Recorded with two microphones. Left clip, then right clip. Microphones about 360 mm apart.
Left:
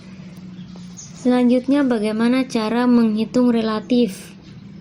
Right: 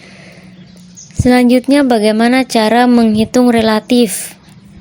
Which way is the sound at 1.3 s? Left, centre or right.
Right.